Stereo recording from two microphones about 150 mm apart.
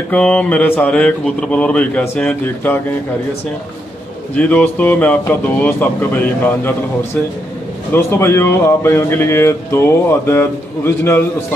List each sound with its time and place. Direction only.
0.1 s speech: 5° left (ahead or behind)
4.4 s speech: 10° left (ahead or behind)